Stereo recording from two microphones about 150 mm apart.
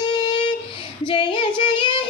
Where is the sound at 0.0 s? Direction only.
30° left (ahead or behind).